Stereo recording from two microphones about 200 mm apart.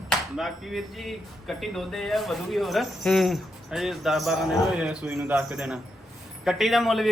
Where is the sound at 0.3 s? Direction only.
Centre (ahead or behind).